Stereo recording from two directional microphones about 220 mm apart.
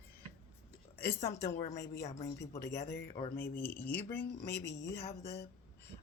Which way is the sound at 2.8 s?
50° left (ahead or behind).